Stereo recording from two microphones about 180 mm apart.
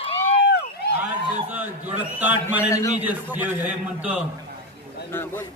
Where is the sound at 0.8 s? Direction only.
60° left (ahead or behind).